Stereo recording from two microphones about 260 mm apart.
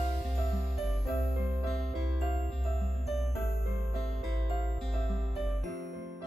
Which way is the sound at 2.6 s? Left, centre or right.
Centre.